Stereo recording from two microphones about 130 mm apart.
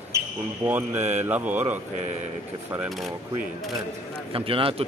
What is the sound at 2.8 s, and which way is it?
Speech, centre (ahead or behind).